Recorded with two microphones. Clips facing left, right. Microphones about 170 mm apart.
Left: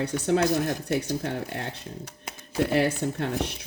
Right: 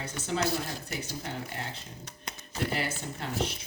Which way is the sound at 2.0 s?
10° left (ahead or behind).